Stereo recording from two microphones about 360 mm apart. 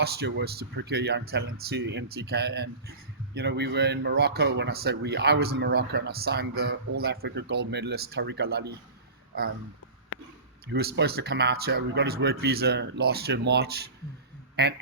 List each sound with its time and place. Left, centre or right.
0.0 s speech: right
10.7 s speech: right